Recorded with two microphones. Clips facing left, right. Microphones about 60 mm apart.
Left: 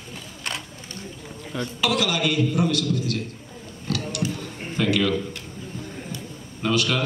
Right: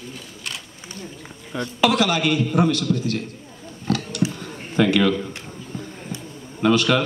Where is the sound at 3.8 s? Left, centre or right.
Right.